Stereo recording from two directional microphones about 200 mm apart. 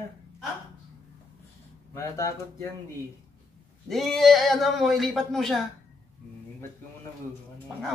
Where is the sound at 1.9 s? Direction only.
15° left (ahead or behind).